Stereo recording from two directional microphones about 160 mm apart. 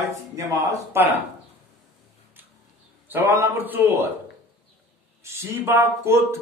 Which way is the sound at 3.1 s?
15° right (ahead or behind).